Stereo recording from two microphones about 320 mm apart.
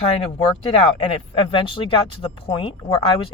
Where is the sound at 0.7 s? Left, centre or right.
Centre.